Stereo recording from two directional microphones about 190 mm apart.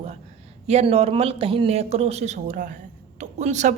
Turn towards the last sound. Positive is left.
turn(degrees=-40)  # may be behind; listen again after turning